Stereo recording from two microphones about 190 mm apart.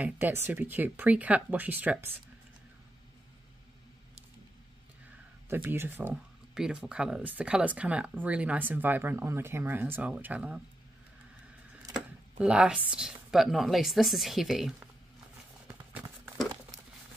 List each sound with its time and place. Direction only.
0.0 s speech: 10° right (ahead or behind)
5.5 s speech: 10° right (ahead or behind)
11.9 s speech: 5° right (ahead or behind)